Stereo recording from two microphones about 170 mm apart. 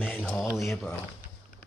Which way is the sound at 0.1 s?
5° left (ahead or behind).